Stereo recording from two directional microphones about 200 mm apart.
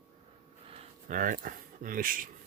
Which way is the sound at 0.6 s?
30° right (ahead or behind).